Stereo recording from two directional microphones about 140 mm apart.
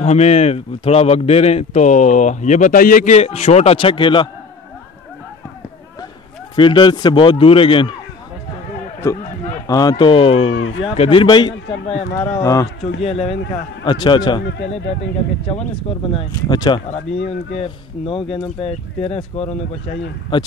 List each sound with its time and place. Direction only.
0.0 s a man's voice: 50° left (ahead or behind); by 3.2 s 70° left (ahead or behind)
3.2 s a man's voice: 45° left (ahead or behind)
6.5 s speech: 35° left (ahead or behind)
9.7 s speech: 25° left (ahead or behind)
12.2 s speech: 25° left (ahead or behind)
13.0 s a man's voice: 45° left (ahead or behind)
13.8 s speech: 35° left (ahead or behind)
16.4 s speech: 30° left (ahead or behind)
16.9 s a man's voice: 45° left (ahead or behind)